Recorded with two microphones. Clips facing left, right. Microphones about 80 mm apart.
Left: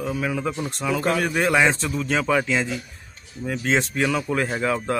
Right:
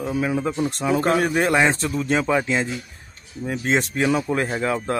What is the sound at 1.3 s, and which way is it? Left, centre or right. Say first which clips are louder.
Speech: right 1 dB; centre.